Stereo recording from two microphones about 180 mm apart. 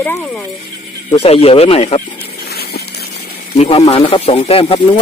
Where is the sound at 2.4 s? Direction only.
60° left (ahead or behind).